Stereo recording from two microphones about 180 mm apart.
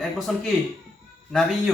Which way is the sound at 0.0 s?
5° left (ahead or behind).